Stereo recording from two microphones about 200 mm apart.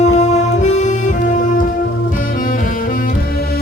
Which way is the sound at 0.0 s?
35° left (ahead or behind).